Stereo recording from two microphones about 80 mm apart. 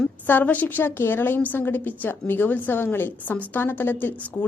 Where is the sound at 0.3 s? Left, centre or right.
Left.